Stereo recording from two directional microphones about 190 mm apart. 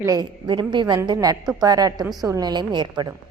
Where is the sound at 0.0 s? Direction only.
20° right (ahead or behind).